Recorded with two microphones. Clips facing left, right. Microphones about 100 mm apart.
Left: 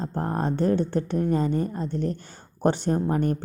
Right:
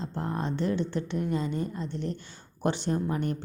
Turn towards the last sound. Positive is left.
turn(degrees=40)  # may be behind; listen again after turning